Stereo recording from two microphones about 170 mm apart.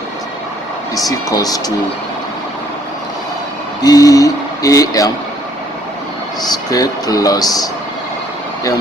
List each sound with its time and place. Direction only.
1.3 s speech: 20° left (ahead or behind)
3.8 s speech: 20° left (ahead or behind)
6.4 s speech: 20° left (ahead or behind)